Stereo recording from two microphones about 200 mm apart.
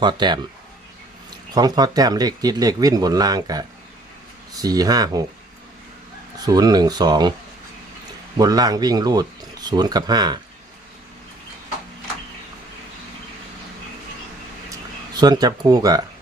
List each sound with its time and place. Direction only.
0.0 s speech: 20° right (ahead or behind)
1.5 s speech: 20° right (ahead or behind)
6.4 s speech: 20° right (ahead or behind)
8.4 s speech: 20° right (ahead or behind)
14.7 s speech: 20° right (ahead or behind)